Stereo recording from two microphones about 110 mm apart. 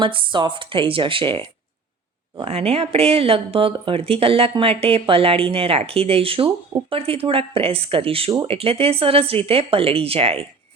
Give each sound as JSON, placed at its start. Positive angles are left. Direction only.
{"t": 0.0, "sound": "speech", "side_deg": -50}
{"t": 2.4, "sound": "speech", "side_deg": -65}